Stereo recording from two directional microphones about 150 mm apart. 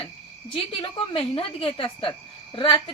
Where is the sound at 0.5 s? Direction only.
35° left (ahead or behind).